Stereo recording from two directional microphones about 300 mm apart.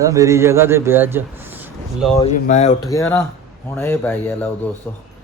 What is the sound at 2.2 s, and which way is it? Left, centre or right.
Speech, left.